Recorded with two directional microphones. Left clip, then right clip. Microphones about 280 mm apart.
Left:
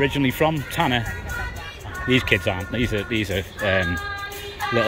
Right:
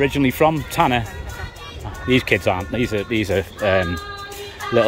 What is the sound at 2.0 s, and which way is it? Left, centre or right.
Speech, centre.